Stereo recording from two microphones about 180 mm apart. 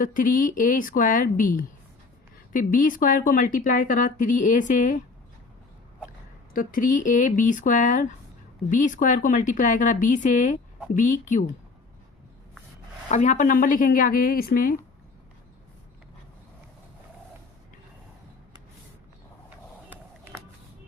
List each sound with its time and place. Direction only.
0.0 s speech: 50° left (ahead or behind)
6.5 s speech: 50° left (ahead or behind)
13.1 s speech: 40° left (ahead or behind)